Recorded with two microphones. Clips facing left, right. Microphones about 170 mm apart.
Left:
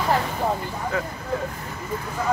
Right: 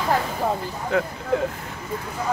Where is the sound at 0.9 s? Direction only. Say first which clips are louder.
Right 6 dB; 70° right (ahead or behind).